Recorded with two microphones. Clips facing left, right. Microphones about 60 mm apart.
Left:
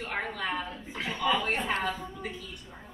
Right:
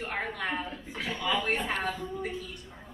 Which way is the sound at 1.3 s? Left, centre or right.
Centre.